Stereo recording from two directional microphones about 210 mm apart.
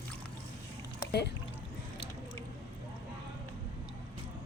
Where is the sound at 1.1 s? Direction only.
50° left (ahead or behind).